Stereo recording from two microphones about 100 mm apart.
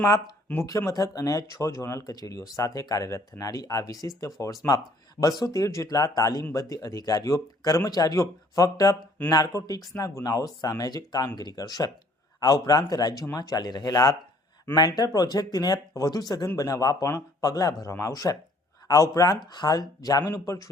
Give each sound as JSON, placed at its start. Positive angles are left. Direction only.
{"t": 0.5, "sound": "speech", "side_deg": 15}
{"t": 0.9, "sound": "speech", "side_deg": 35}